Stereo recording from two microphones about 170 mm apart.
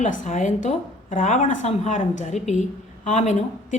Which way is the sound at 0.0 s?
45° left (ahead or behind).